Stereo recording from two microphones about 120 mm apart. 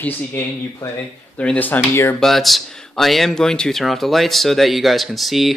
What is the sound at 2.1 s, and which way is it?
Speech, centre (ahead or behind).